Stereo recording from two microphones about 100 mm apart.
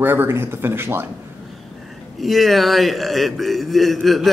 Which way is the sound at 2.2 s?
Centre (ahead or behind).